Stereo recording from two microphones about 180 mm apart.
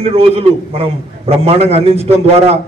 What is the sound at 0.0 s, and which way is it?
A man's voice, 30° right (ahead or behind).